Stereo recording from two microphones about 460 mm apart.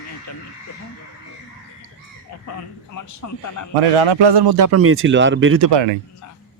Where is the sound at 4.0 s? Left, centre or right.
Right.